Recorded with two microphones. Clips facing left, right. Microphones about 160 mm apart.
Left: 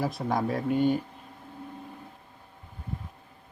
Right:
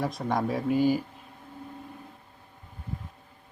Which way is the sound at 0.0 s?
Centre (ahead or behind).